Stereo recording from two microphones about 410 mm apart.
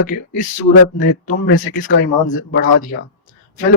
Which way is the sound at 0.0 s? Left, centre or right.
Centre.